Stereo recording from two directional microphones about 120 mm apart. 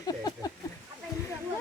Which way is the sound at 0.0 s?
30° left (ahead or behind).